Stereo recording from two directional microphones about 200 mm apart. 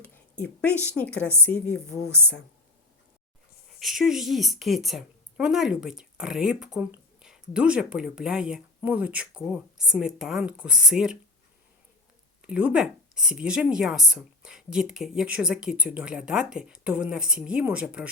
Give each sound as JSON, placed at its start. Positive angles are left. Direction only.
{"t": 0.0, "sound": "a woman's voice", "side_deg": 5}
{"t": 3.7, "sound": "a woman's voice", "side_deg": 0}
{"t": 12.4, "sound": "a woman's voice", "side_deg": -5}